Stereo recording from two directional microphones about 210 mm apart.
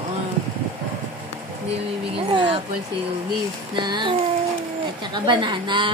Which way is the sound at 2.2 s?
25° right (ahead or behind).